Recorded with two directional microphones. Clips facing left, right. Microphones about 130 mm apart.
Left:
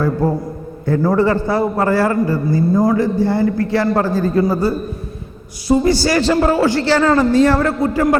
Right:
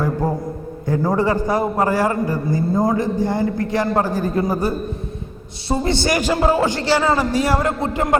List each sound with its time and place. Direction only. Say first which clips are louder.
0.9 s a man's voice: left 4 dB; 15° right (ahead or behind)